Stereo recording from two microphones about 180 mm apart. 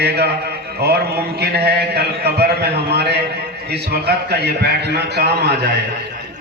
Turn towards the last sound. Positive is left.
turn(degrees=-65)  # may be behind; listen again after turning